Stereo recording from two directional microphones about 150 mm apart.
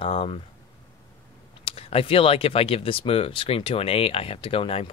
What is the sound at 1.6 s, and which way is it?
Speech, 40° left (ahead or behind).